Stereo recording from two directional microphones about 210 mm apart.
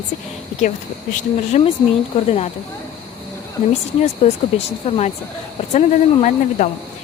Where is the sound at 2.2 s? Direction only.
30° left (ahead or behind).